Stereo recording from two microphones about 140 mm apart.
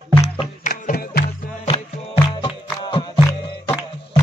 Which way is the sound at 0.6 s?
70° left (ahead or behind).